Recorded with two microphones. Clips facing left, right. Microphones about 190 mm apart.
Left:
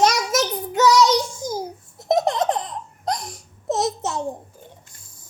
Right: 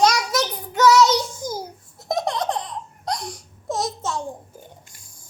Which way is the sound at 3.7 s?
20° left (ahead or behind).